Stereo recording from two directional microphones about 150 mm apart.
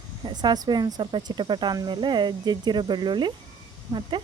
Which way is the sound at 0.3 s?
30° right (ahead or behind).